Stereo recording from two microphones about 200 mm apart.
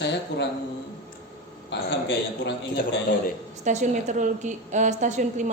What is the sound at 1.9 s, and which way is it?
A man's voice, 60° left (ahead or behind).